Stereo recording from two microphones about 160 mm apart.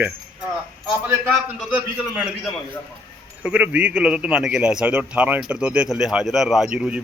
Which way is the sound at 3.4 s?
10° right (ahead or behind).